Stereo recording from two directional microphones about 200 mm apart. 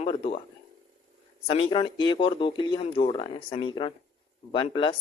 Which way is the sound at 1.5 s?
25° left (ahead or behind).